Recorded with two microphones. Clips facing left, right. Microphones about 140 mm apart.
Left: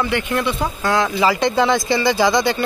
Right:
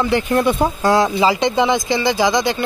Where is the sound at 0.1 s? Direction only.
35° right (ahead or behind).